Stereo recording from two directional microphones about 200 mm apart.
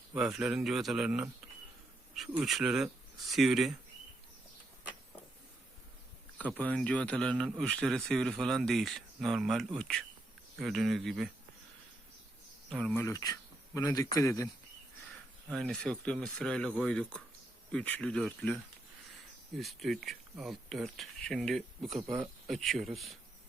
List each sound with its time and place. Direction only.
0.1 s speech: 5° right (ahead or behind)
6.4 s speech: 5° left (ahead or behind)
12.7 s speech: 5° left (ahead or behind)
13.1 s speech: 15° left (ahead or behind)
15.4 s speech: centre (ahead or behind)
19.5 s speech: centre (ahead or behind)